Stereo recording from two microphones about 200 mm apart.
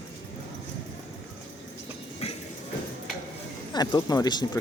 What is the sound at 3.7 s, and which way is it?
Speech, 20° left (ahead or behind).